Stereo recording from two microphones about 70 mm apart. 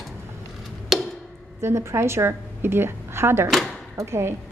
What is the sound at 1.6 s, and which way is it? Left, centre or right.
A woman's voice, right.